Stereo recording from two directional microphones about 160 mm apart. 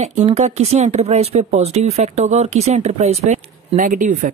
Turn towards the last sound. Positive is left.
turn(degrees=-55)  # may be behind; listen again after turning